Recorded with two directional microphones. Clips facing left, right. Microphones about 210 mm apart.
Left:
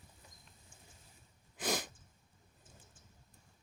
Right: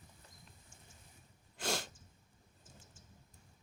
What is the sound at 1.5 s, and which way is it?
Sneeze, 15° left (ahead or behind).